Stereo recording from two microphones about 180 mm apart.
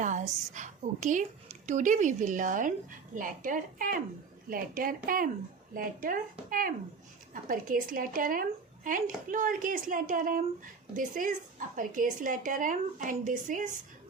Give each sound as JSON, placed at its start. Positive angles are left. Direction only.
{"t": 0.0, "sound": "a woman's voice", "side_deg": -45}